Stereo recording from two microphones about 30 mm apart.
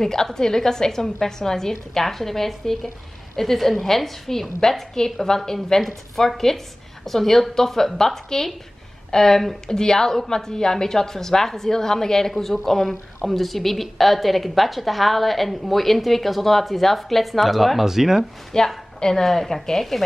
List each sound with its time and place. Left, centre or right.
0.0 s a woman's voice: left
5.8 s a woman's voice: centre
9.7 s a woman's voice: left; by 17.8 s centre
17.8 s speech: centre
18.5 s a woman's voice: left
19.2 s a woman's voice: centre